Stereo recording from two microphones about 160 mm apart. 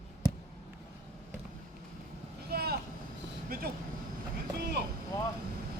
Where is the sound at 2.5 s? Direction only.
75° right (ahead or behind).